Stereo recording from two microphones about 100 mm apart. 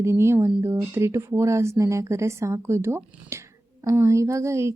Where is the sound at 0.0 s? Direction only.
25° right (ahead or behind).